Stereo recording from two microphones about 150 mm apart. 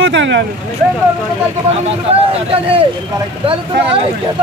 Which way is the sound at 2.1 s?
40° right (ahead or behind).